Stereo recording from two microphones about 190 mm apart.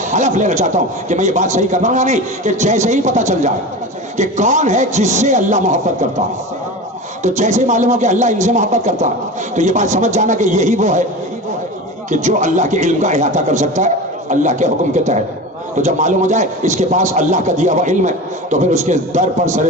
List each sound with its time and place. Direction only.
0.1 s a man's voice: 40° right (ahead or behind)
7.2 s a man's voice: 40° right (ahead or behind)
12.1 s a man's voice: 40° right (ahead or behind)